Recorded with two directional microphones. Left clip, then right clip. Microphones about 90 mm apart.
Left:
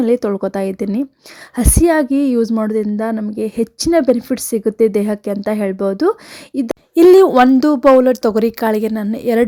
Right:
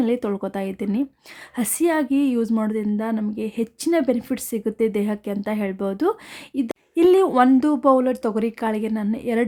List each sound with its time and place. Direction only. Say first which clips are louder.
0.0 s a woman's voice: left 8 dB; 45° left (ahead or behind)
7.6 s speech: left 8 dB; 35° left (ahead or behind)